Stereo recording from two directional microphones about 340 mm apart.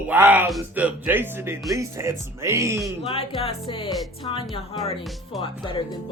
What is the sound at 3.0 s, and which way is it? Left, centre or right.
Speech, centre.